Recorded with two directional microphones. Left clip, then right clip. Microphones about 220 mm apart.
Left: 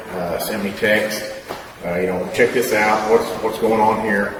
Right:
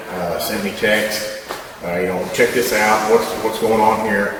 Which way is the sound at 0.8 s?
10° left (ahead or behind).